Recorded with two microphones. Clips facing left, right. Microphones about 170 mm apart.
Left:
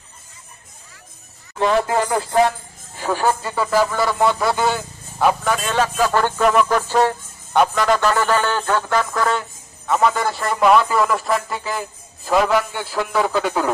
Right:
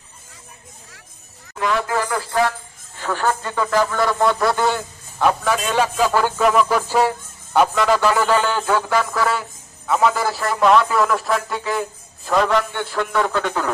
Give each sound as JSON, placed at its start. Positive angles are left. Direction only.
{"t": 1.6, "sound": "speech", "side_deg": 30}
{"t": 3.0, "sound": "a man's voice", "side_deg": 10}
{"t": 5.6, "sound": "a man's voice", "side_deg": -10}